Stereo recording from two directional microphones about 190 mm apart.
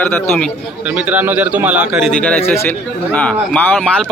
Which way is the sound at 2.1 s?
5° left (ahead or behind).